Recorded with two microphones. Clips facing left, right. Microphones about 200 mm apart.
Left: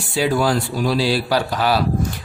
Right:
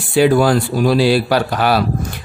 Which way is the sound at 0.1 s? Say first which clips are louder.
Right 6 dB; 55° right (ahead or behind).